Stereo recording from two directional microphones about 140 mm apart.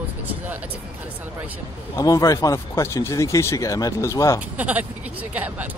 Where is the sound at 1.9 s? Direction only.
25° left (ahead or behind).